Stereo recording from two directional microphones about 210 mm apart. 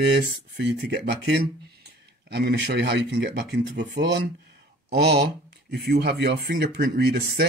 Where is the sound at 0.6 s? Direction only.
50° right (ahead or behind).